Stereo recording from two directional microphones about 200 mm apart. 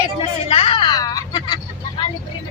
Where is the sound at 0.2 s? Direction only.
30° left (ahead or behind).